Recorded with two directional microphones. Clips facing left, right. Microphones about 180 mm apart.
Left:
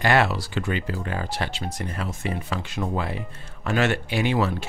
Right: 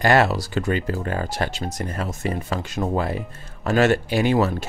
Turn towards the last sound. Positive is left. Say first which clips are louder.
# right 4 dB
turn(degrees=-40)  # may be behind; listen again after turning